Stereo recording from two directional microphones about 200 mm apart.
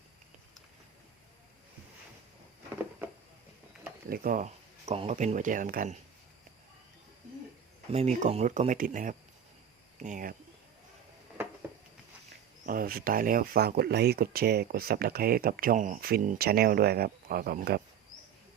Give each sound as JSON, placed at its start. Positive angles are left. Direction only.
{"t": 4.1, "sound": "speech", "side_deg": -45}
{"t": 7.9, "sound": "speech", "side_deg": -35}
{"t": 12.6, "sound": "speech", "side_deg": -45}